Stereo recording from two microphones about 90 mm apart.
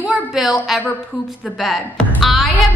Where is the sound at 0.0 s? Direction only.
5° right (ahead or behind).